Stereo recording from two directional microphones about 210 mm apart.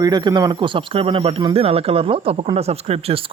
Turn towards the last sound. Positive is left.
turn(degrees=-30)  # may be behind; listen again after turning